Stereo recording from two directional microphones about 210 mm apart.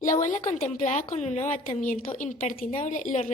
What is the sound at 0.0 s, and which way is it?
A woman's voice, 40° left (ahead or behind).